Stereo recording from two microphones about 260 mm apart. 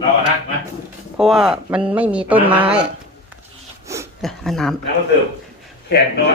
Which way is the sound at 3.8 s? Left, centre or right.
Centre.